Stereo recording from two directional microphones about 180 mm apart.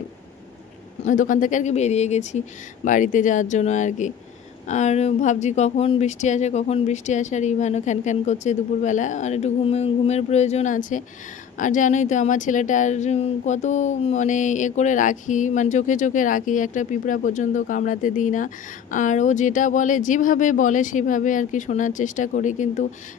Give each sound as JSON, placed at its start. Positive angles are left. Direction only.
{"t": 1.0, "sound": "a woman's voice", "side_deg": 45}